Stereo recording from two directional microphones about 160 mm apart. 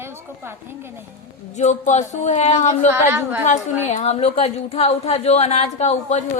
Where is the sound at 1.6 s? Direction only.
50° left (ahead or behind).